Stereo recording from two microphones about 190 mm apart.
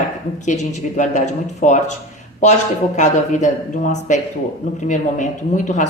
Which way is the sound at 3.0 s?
40° left (ahead or behind).